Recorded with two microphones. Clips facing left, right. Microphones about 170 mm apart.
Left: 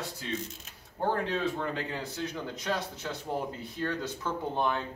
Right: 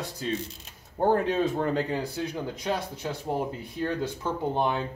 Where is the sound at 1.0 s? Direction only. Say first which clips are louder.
Right 7 dB; 50° right (ahead or behind).